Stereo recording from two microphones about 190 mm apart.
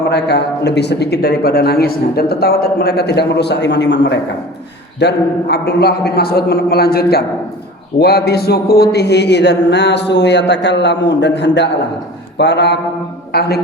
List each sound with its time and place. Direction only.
0.1 s a man's voice: 60° left (ahead or behind)